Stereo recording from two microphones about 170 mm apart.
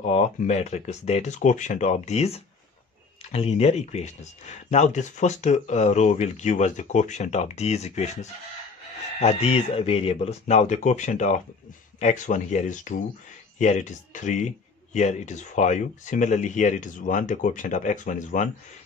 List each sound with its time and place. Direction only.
0.0 s speech: 40° left (ahead or behind)